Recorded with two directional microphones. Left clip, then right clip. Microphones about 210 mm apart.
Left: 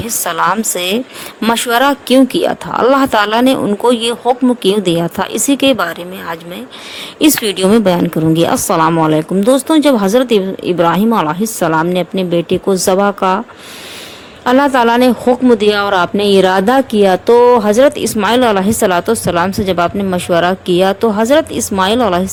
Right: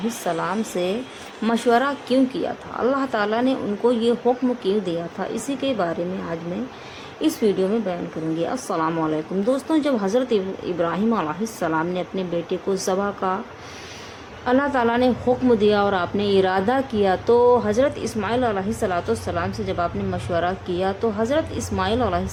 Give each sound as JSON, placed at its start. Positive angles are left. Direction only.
{"t": 0.3, "sound": "a woman's voice", "side_deg": 50}
{"t": 14.4, "sound": "a woman's voice", "side_deg": 45}